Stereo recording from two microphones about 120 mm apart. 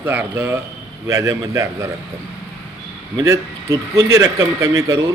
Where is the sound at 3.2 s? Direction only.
25° right (ahead or behind).